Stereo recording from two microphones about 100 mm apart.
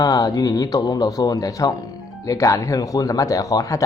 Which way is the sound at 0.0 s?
40° left (ahead or behind).